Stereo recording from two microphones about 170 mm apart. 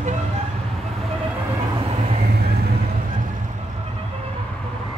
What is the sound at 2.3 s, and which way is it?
Vehicle, 70° right (ahead or behind).